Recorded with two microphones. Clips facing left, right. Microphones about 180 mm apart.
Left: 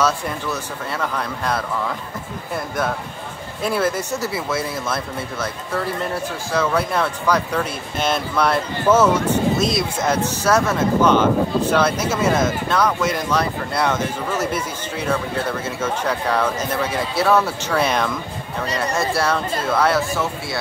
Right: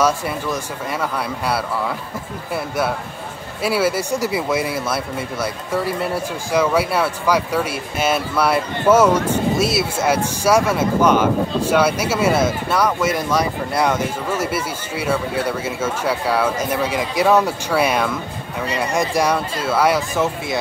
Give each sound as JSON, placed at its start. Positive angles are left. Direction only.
{"t": 0.0, "sound": "speech", "side_deg": -10}
{"t": 3.6, "sound": "speech", "side_deg": -5}